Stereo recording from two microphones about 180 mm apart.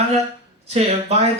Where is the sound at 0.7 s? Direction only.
35° right (ahead or behind).